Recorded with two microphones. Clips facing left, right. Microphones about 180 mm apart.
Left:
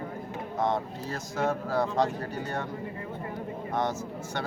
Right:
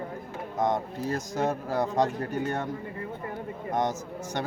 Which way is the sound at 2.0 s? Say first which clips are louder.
Right 3 dB; 45° right (ahead or behind).